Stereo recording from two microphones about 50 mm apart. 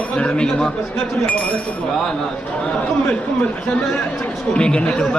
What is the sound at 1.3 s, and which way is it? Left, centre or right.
Speech, left.